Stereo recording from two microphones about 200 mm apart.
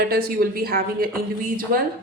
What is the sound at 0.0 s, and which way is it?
A woman's voice, 50° right (ahead or behind).